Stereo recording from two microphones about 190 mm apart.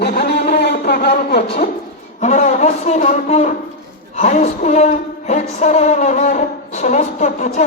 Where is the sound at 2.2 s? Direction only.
40° left (ahead or behind).